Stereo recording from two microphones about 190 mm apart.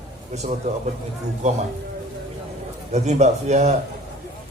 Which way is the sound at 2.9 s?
35° right (ahead or behind).